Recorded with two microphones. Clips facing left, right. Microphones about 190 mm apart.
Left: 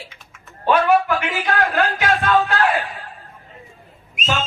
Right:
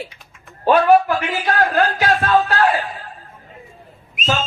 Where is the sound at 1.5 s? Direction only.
40° right (ahead or behind).